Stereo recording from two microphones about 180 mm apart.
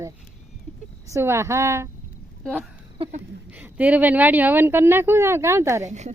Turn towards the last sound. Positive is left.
turn(degrees=-40)  # may be behind; listen again after turning